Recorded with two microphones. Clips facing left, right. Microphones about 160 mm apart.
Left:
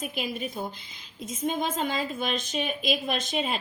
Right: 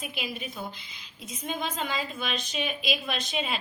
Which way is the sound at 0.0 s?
45° left (ahead or behind).